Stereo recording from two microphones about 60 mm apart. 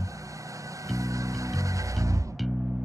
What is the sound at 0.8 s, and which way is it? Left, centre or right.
Music, right.